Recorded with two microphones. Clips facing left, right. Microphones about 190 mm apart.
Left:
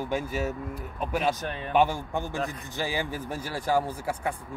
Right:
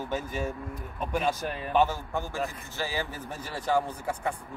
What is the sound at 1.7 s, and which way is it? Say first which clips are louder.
Speech: left 2 dB; 15° left (ahead or behind).